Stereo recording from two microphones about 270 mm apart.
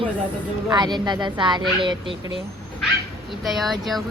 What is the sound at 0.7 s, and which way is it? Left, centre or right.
Speech, centre.